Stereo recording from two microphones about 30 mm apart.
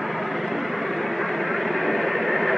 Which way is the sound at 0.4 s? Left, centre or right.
Centre.